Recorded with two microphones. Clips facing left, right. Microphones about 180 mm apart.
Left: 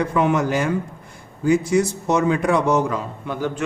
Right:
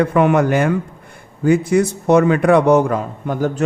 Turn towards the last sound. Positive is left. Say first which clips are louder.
# right 5 dB
turn(degrees=-45)  # may be behind; listen again after turning